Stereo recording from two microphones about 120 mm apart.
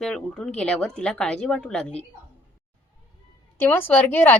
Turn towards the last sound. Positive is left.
turn(degrees=15)  # may be behind; listen again after turning